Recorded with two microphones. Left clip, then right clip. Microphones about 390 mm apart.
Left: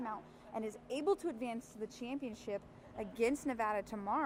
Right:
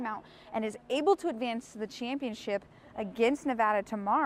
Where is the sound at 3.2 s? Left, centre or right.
Right.